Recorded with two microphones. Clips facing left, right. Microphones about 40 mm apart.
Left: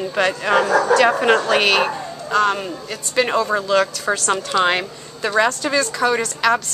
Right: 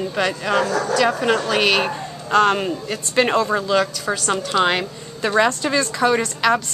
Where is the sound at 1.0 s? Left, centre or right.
Left.